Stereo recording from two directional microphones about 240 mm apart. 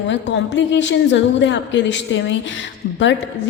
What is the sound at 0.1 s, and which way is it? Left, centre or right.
A woman's voice, left.